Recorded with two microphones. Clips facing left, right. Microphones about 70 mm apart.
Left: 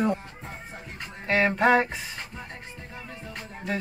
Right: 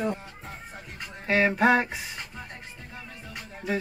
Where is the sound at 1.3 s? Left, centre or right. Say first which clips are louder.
Even; centre.